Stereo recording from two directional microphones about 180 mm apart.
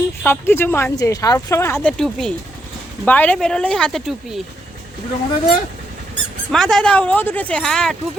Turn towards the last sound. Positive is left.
turn(degrees=5)  # may be behind; listen again after turning